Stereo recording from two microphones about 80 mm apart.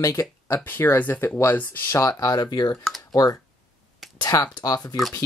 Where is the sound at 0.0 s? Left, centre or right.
Left.